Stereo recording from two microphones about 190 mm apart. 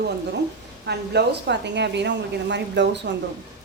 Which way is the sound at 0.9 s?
60° right (ahead or behind).